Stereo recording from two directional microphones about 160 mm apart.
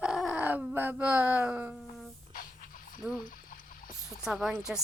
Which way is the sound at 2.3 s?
60° left (ahead or behind).